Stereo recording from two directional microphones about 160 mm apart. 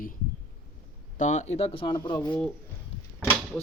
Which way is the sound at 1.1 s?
50° left (ahead or behind).